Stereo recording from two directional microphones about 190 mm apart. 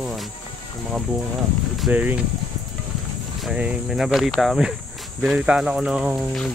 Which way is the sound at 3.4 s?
5° right (ahead or behind).